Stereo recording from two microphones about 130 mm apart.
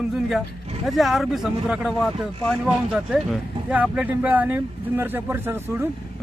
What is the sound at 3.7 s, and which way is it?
Speech, 10° right (ahead or behind).